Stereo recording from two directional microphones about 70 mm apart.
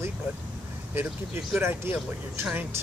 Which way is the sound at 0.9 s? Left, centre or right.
Right.